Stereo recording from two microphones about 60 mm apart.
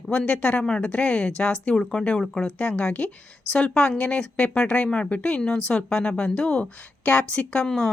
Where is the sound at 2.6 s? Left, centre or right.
Left.